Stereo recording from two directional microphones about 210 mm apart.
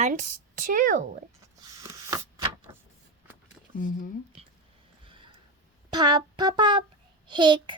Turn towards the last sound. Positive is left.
turn(degrees=-20)  # may be behind; listen again after turning